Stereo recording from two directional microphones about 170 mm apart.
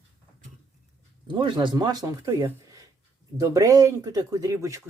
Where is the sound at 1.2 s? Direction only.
30° right (ahead or behind).